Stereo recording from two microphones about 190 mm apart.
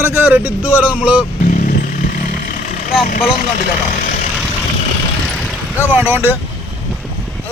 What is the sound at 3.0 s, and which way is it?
Speech, 45° left (ahead or behind).